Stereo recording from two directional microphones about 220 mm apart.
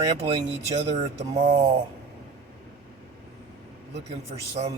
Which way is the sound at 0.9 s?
30° right (ahead or behind).